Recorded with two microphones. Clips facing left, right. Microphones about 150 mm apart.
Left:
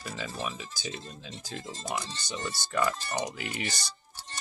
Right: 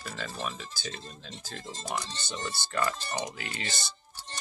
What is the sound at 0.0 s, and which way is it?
Speech, 10° left (ahead or behind).